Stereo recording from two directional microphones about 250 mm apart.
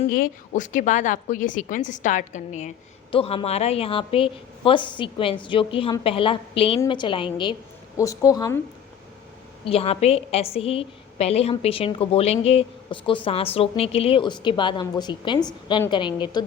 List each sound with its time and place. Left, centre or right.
0.0 s a woman's voice: left; by 8.6 s centre
9.6 s a woman's voice: left